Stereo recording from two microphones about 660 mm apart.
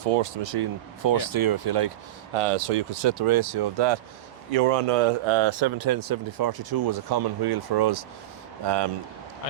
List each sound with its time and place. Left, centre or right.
0.0 s speech: right
1.0 s speech: right
2.3 s speech: right
4.5 s speech: right